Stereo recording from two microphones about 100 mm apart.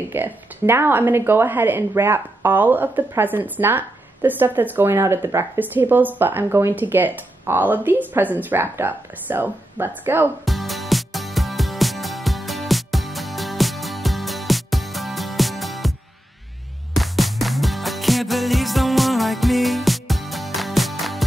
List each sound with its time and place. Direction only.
0.1 s speech: 20° right (ahead or behind)
10.4 s music: centre (ahead or behind)
16.9 s music: centre (ahead or behind)